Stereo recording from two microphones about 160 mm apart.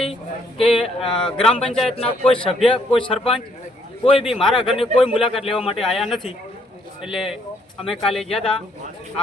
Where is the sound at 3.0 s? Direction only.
35° left (ahead or behind).